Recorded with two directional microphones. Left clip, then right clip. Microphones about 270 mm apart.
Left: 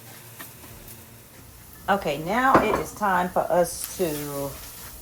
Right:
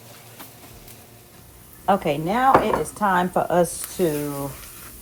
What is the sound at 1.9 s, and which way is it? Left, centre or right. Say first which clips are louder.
Speech: right 3 dB; right.